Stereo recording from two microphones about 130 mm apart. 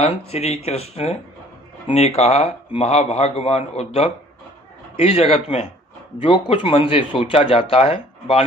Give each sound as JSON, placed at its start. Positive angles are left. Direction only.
{"t": 0.0, "sound": "speech", "side_deg": 55}